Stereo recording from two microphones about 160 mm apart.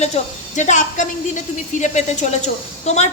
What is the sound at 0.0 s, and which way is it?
A woman's voice, 45° left (ahead or behind).